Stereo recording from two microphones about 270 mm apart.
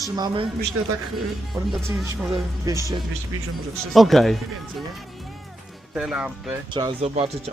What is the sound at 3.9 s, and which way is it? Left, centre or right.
Speech, centre.